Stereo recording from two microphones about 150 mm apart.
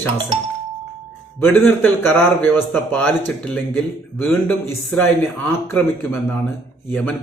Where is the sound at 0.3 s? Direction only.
35° right (ahead or behind).